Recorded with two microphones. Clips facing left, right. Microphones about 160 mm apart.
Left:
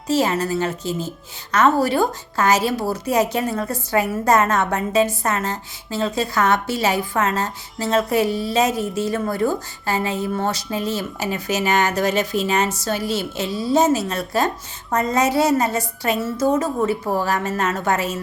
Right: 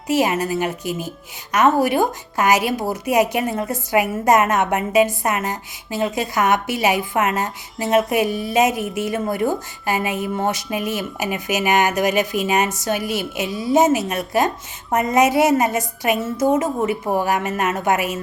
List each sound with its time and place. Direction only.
0.1 s a woman's voice: 15° right (ahead or behind)